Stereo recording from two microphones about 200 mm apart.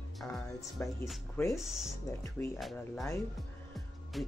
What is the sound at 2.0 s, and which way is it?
Speech, 15° left (ahead or behind).